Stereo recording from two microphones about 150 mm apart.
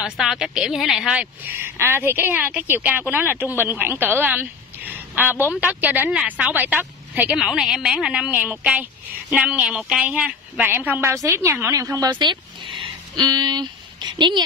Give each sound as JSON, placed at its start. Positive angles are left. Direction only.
{"t": 0.0, "sound": "a woman's voice", "side_deg": -5}